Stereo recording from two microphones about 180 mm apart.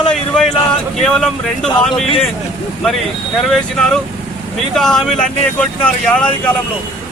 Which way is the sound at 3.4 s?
Centre (ahead or behind).